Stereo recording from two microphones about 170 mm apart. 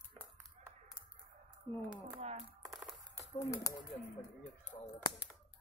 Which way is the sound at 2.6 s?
Centre (ahead or behind).